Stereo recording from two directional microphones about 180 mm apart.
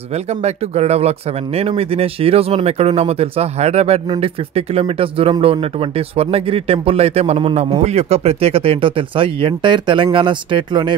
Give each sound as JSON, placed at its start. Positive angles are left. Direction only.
{"t": 0.1, "sound": "speech", "side_deg": -35}